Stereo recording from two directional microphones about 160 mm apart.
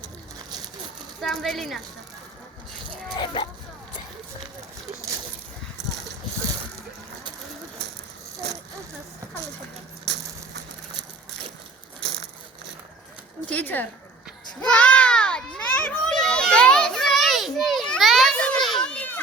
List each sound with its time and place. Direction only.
1.2 s speech: centre (ahead or behind)
3.2 s speech: 30° left (ahead or behind)
8.4 s a sound: 90° right
10.1 s a sound: 90° right
13.5 s speech: 10° left (ahead or behind)
14.6 s children playing: 5° left (ahead or behind)